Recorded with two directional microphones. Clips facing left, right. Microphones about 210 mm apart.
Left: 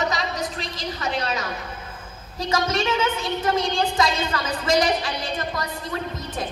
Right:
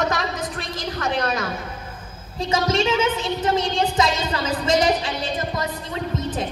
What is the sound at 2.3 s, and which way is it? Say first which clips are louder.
A woman's voice: right 3 dB; 25° right (ahead or behind).